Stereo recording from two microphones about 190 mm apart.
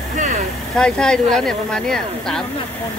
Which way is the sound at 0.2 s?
40° right (ahead or behind).